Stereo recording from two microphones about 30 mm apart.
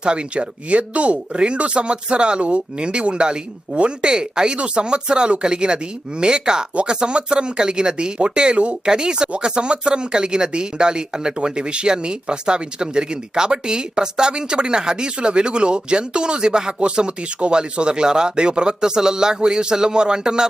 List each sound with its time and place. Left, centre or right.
0.0 s speech: right
1.3 s speech: right
4.5 s speech: right